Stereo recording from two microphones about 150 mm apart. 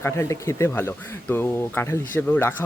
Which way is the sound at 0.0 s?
15° left (ahead or behind).